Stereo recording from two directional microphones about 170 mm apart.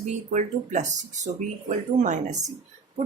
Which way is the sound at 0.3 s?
45° right (ahead or behind).